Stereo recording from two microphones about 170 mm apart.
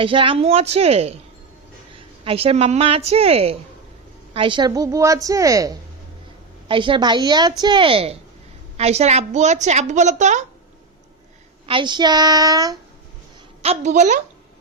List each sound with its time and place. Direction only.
0.0 s a woman's voice: 30° right (ahead or behind)
2.2 s a woman's voice: 35° right (ahead or behind)
11.6 s a woman's voice: 30° right (ahead or behind)
13.6 s a woman's voice: 40° right (ahead or behind)